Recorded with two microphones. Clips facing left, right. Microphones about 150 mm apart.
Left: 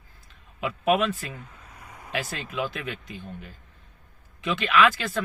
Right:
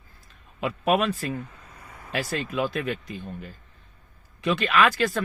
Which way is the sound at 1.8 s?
15° left (ahead or behind).